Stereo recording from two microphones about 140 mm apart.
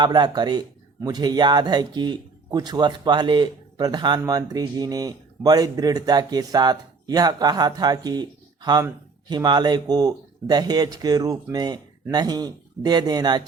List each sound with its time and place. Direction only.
0.0 s speech: 30° right (ahead or behind)